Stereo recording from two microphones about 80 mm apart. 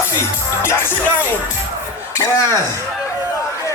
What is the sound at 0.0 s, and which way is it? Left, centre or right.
Music, left.